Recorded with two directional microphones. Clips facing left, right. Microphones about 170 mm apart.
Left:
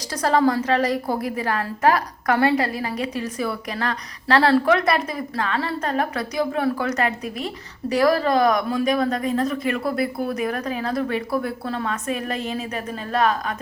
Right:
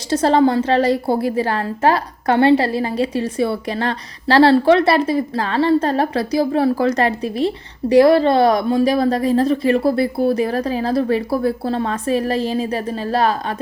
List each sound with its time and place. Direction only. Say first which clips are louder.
0.1 s a woman's voice: right 5 dB; 30° right (ahead or behind)